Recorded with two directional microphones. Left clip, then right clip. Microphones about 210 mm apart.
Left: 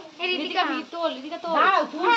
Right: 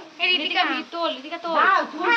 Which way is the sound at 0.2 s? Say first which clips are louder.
Right 4 dB; 30° left (ahead or behind).